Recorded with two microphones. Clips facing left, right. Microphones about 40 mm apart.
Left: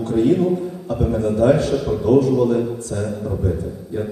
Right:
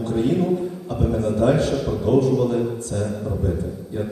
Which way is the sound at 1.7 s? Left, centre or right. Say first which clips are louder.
Left 3 dB; centre.